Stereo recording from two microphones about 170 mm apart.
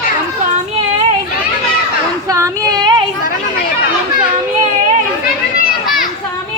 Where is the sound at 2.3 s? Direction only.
20° right (ahead or behind).